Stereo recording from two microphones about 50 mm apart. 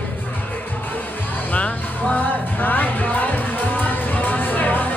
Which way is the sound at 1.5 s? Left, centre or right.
Left.